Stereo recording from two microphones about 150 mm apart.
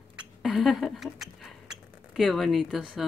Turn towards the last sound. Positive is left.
turn(degrees=0)  # may be behind; listen again after turning